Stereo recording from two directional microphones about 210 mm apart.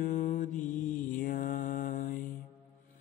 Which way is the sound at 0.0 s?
40° left (ahead or behind).